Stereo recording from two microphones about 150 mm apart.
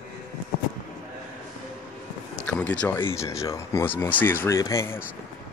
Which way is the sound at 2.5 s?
10° left (ahead or behind).